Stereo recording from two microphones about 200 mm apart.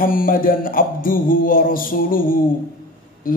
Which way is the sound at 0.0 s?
45° left (ahead or behind).